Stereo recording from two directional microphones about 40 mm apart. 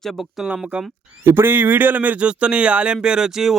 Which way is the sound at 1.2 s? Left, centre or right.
Right.